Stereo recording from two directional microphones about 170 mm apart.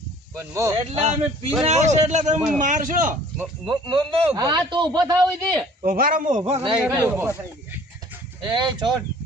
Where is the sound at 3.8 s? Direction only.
35° right (ahead or behind).